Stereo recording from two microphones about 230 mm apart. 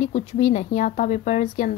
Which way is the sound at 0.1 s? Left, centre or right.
Left.